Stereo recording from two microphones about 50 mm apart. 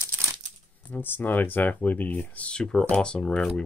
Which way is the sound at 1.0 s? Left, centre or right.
Left.